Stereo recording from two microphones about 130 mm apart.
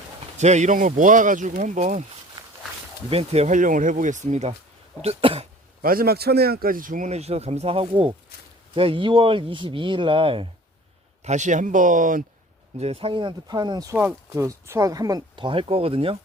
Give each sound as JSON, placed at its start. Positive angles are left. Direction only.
{"t": 0.3, "sound": "speech", "side_deg": -60}
{"t": 3.1, "sound": "speech", "side_deg": -50}
{"t": 3.5, "sound": "speech", "side_deg": -90}
{"t": 5.0, "sound": "speech", "side_deg": -50}
{"t": 6.7, "sound": "speech", "side_deg": -90}
{"t": 11.2, "sound": "speech", "side_deg": -65}
{"t": 12.8, "sound": "speech", "side_deg": -45}
{"t": 13.9, "sound": "speech", "side_deg": -20}